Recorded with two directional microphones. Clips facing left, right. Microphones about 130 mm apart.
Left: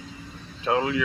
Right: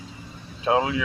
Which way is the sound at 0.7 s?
20° right (ahead or behind).